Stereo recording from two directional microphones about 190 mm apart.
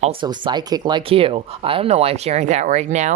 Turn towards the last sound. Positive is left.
turn(degrees=-40)  # may be behind; listen again after turning